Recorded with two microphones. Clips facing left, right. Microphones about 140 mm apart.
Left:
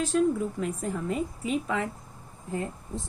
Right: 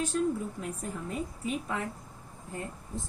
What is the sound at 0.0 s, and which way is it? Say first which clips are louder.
A woman's voice: left 5 dB; 90° left.